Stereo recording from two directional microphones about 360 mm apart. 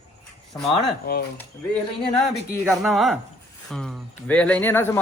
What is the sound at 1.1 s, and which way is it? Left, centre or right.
Speech, left.